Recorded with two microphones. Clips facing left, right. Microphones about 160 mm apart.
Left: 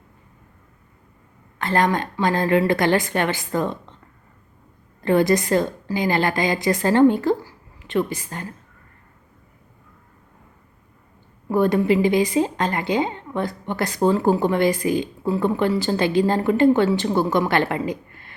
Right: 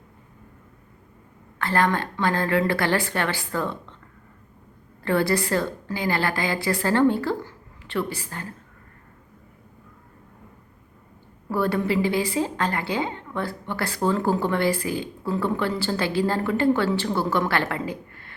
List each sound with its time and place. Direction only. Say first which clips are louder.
1.5 s a woman's voice: left 2 dB; 20° left (ahead or behind)
5.0 s a woman's voice: left 5 dB; 15° left (ahead or behind)
11.4 s a woman's voice: left 5 dB; 15° left (ahead or behind)